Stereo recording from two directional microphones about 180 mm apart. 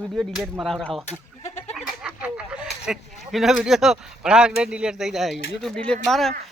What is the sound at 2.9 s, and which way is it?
Speech, centre (ahead or behind).